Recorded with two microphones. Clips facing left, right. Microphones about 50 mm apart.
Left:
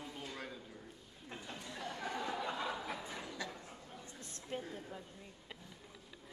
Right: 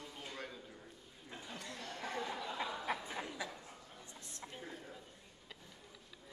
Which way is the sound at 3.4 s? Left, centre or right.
Centre.